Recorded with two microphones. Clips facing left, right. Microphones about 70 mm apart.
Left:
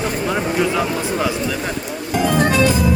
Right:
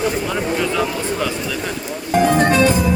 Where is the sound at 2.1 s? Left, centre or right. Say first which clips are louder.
Right 2 dB; right.